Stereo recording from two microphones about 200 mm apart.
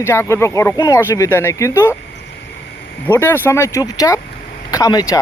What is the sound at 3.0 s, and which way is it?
Speech, 10° left (ahead or behind).